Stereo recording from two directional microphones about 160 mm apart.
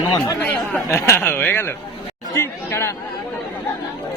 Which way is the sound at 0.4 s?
10° left (ahead or behind).